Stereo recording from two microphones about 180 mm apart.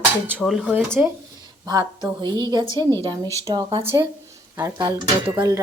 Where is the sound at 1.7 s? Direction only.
25° right (ahead or behind).